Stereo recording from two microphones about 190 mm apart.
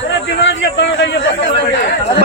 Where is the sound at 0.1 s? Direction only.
70° left (ahead or behind).